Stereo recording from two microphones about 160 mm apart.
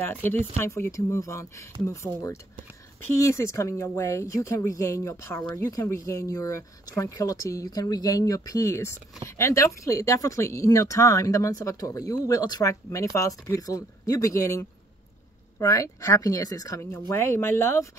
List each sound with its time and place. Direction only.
0.0 s speech: 15° left (ahead or behind)